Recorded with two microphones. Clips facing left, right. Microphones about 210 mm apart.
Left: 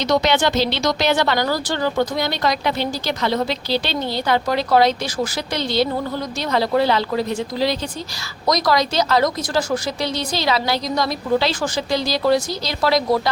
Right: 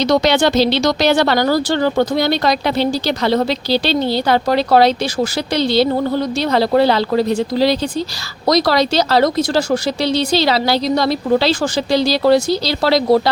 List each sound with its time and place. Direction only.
0.0 s speech: 35° right (ahead or behind)
9.6 s speech: 75° right (ahead or behind)
10.3 s speech: 30° right (ahead or behind)